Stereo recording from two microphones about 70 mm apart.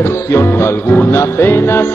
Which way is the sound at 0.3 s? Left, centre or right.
Left.